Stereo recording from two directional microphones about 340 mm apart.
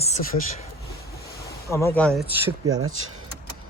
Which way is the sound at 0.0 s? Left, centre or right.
Centre.